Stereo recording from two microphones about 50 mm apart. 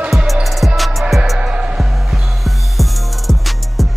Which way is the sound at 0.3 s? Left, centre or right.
Centre.